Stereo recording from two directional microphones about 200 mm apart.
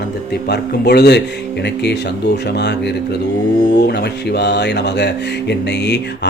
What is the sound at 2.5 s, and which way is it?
Speech, 60° left (ahead or behind).